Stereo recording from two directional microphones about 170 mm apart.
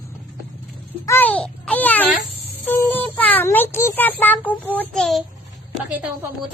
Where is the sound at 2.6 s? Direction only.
10° left (ahead or behind).